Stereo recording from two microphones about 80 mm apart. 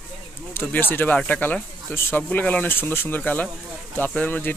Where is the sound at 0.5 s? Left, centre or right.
Left.